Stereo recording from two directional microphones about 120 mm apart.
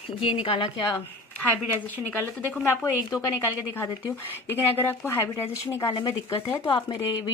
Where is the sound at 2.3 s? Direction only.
15° left (ahead or behind).